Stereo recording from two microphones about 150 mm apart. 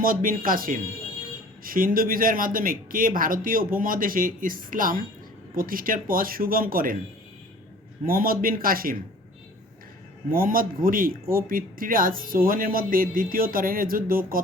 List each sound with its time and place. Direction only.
0.0 s speech: 70° right (ahead or behind)
8.0 s speech: 70° right (ahead or behind)
10.3 s speech: 70° right (ahead or behind)